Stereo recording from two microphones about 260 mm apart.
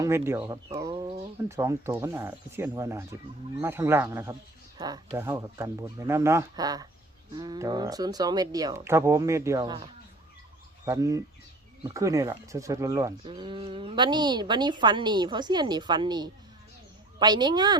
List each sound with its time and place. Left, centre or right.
0.0 s speech: centre
0.7 s a sound: centre
1.5 s speech: centre